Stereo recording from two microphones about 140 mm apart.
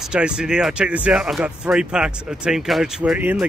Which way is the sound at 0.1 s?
5° right (ahead or behind).